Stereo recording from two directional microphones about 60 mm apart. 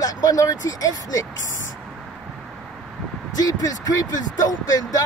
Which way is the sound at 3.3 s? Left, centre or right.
Left.